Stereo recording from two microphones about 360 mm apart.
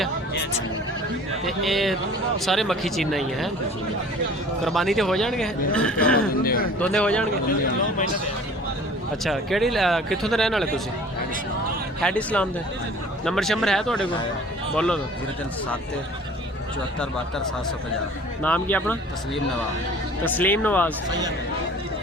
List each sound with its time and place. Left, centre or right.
1.5 s speech: centre
4.6 s speech: centre
6.4 s a man's voice: left
6.7 s speech: centre
9.2 s speech: centre
12.0 s speech: centre
18.4 s speech: centre
20.2 s speech: centre
21.1 s speech: centre